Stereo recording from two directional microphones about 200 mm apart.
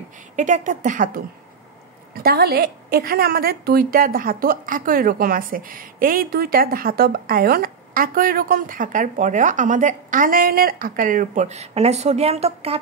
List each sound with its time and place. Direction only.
0.4 s a woman's voice: 40° right (ahead or behind)